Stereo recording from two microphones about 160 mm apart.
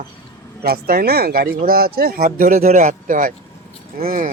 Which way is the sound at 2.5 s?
45° right (ahead or behind).